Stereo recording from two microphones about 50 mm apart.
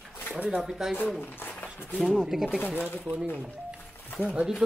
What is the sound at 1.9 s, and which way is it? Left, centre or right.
Speech, centre.